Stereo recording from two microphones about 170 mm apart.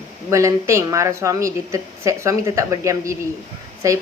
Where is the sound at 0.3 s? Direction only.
15° right (ahead or behind).